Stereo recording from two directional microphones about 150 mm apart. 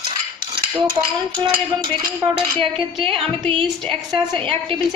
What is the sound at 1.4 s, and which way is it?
A woman's voice, 30° right (ahead or behind).